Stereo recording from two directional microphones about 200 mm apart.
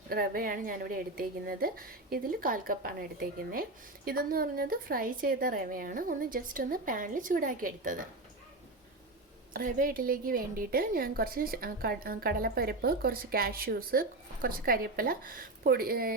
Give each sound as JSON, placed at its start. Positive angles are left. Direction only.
{"t": 0.1, "sound": "a woman's voice", "side_deg": -45}
{"t": 9.5, "sound": "a woman's voice", "side_deg": -45}